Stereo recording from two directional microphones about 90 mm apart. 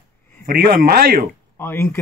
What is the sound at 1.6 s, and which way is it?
Speech, 25° left (ahead or behind).